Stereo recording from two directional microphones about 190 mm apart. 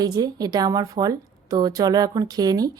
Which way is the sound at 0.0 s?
20° right (ahead or behind).